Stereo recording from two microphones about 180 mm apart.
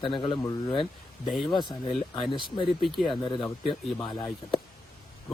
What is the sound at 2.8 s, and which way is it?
Speech, centre (ahead or behind).